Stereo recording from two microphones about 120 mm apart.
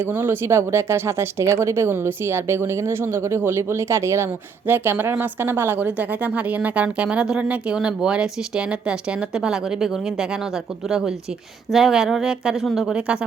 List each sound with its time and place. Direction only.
0.0 s a woman's voice: 15° right (ahead or behind)